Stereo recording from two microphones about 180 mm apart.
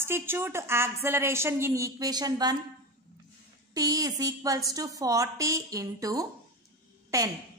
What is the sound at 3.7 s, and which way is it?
A woman's voice, 20° right (ahead or behind).